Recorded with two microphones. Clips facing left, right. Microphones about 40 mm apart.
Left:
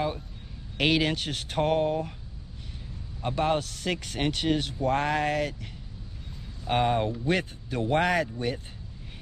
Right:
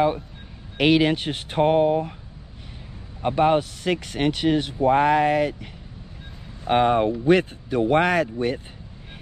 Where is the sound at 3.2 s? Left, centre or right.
Right.